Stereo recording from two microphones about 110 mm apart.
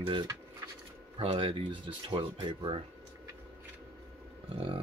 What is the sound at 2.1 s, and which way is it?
Speech, 50° right (ahead or behind).